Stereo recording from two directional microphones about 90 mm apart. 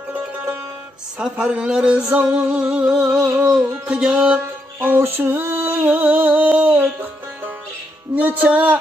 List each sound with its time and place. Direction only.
1.2 s music: 10° right (ahead or behind)
4.7 s music: 25° right (ahead or behind)